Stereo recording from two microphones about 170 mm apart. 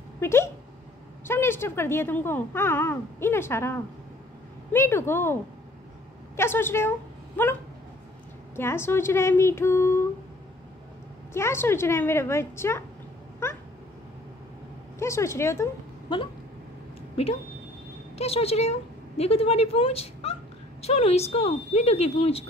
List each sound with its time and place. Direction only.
0.2 s a woman's voice: 15° left (ahead or behind)
8.5 s speech: 15° left (ahead or behind)
11.3 s speech: 15° left (ahead or behind)
15.0 s speech: 15° left (ahead or behind)
18.1 s a woman's voice: 35° left (ahead or behind)